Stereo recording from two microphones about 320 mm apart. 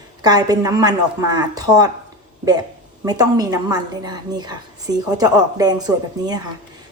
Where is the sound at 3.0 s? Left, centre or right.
Centre.